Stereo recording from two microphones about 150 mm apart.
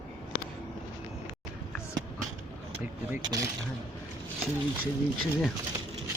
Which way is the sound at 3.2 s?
25° right (ahead or behind).